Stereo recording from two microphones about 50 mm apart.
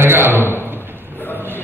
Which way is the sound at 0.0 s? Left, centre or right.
Right.